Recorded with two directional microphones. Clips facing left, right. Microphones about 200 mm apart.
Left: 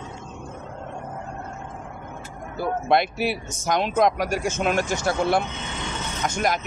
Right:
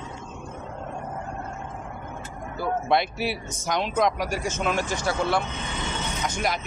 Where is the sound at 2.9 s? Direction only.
50° left (ahead or behind).